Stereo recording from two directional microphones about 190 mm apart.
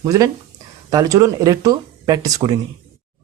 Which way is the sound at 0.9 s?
20° right (ahead or behind).